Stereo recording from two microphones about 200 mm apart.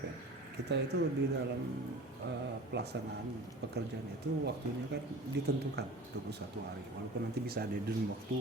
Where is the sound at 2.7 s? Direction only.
60° right (ahead or behind).